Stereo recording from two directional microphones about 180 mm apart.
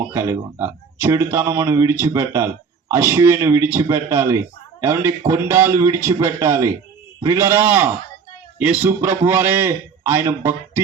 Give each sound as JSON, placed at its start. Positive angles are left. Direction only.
{"t": 0.1, "sound": "a man's voice", "side_deg": -15}